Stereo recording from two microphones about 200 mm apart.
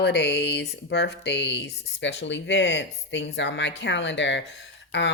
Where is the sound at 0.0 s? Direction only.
55° left (ahead or behind).